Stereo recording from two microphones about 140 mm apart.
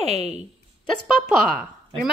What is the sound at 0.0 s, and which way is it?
Speech, 50° right (ahead or behind).